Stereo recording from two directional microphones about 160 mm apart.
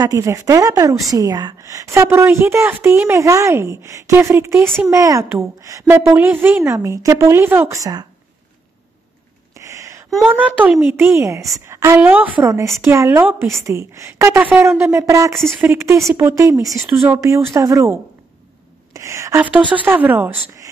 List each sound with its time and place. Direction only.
0.0 s a woman's voice: 20° right (ahead or behind)
9.5 s a sound: 20° right (ahead or behind)
10.2 s a woman's voice: 10° right (ahead or behind)
18.9 s a woman's voice: 20° right (ahead or behind)